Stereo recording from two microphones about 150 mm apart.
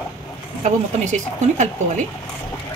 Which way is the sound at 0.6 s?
50° right (ahead or behind).